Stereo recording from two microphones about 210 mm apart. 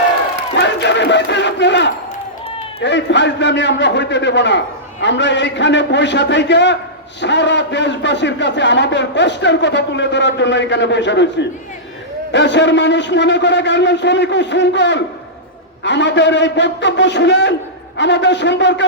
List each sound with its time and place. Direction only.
0.5 s battle cry: 55° left (ahead or behind)
2.8 s a man's voice: 55° left (ahead or behind)